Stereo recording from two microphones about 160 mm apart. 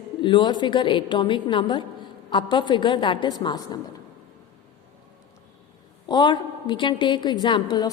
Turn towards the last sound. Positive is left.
turn(degrees=25)  # may be behind; listen again after turning